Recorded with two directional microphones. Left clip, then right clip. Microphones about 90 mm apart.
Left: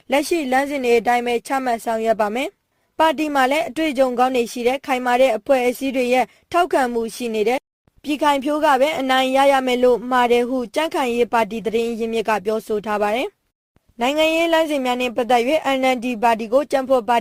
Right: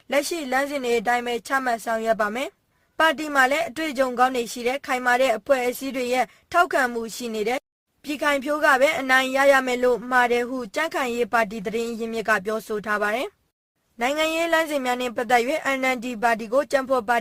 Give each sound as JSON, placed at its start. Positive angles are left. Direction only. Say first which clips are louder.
{"t": 0.2, "sound": "a woman's voice", "louder": "left 3 dB", "side_deg": 35}
{"t": 12.5, "sound": "speech", "louder": "left 5 dB", "side_deg": 20}
{"t": 12.9, "sound": "a woman's voice", "louder": "left 3 dB", "side_deg": 30}